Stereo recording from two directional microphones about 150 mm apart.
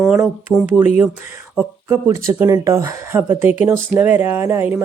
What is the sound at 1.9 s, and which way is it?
Speech, 20° right (ahead or behind).